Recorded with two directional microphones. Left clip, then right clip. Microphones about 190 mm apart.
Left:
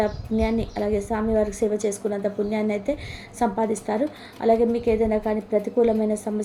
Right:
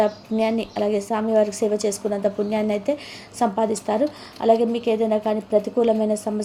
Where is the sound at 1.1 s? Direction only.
15° right (ahead or behind).